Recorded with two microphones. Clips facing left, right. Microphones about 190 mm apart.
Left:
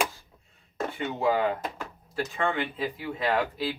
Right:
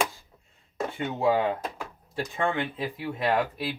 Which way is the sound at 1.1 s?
25° right (ahead or behind).